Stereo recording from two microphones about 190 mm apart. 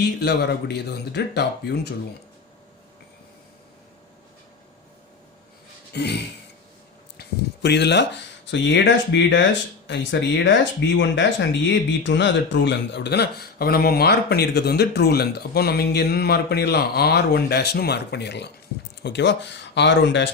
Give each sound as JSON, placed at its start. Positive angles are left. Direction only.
{"t": 0.2, "sound": "speech", "side_deg": 60}
{"t": 5.9, "sound": "speech", "side_deg": 60}